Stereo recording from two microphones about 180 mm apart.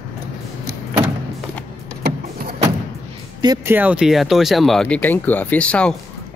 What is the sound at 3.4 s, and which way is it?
Speech, 20° right (ahead or behind).